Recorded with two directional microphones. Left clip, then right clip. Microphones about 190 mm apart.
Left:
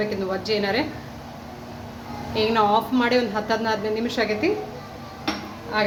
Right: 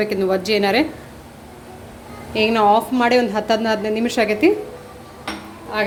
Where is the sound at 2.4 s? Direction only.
40° right (ahead or behind).